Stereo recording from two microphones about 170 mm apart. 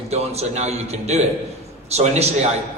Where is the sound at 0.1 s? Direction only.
40° right (ahead or behind).